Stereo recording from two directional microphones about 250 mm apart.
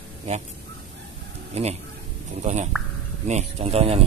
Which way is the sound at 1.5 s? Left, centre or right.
Right.